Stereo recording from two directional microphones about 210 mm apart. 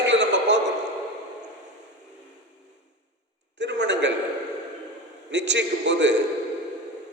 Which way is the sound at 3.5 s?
55° right (ahead or behind).